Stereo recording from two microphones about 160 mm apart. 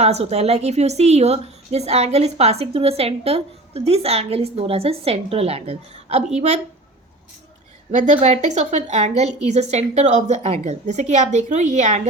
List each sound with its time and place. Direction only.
0.0 s a woman's voice: 40° right (ahead or behind)
7.9 s a woman's voice: 45° right (ahead or behind)